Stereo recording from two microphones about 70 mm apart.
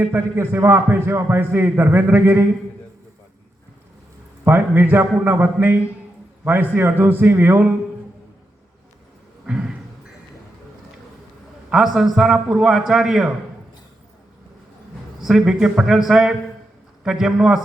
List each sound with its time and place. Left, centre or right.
0.1 s a man's voice: right
4.4 s a man's voice: right
9.5 s a sound: centre
11.9 s a man's voice: centre
15.2 s a man's voice: centre